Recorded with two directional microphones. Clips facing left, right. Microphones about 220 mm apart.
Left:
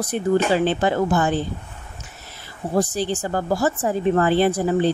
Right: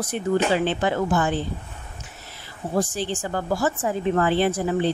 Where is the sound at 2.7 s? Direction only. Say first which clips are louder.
Left 3 dB; 40° left (ahead or behind).